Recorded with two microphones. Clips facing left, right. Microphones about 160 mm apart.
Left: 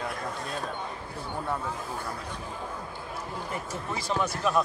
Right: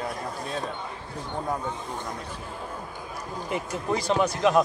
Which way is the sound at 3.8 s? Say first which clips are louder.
Right 6 dB; 35° right (ahead or behind).